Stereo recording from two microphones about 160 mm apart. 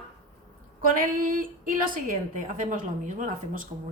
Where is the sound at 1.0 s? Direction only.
60° right (ahead or behind).